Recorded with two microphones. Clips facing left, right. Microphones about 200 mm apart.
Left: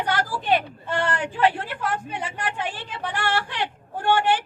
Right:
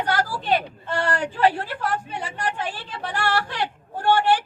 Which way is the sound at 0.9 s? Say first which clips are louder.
Right 1 dB; 40° right (ahead or behind).